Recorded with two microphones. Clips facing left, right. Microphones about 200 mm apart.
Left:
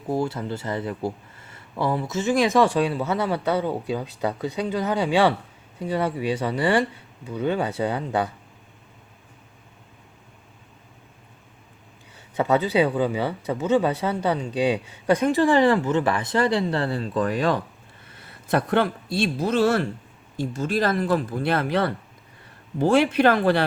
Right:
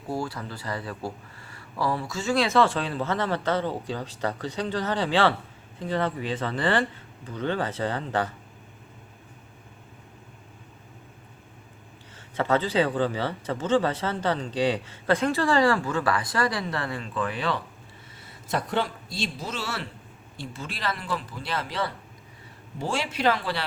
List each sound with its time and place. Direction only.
0.1 s speech: 25° left (ahead or behind)
12.4 s speech: 15° left (ahead or behind); by 17.6 s 45° left (ahead or behind)
18.1 s a man's voice: 60° left (ahead or behind)